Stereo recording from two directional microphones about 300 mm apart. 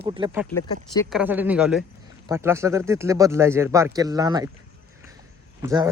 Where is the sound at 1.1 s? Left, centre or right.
Centre.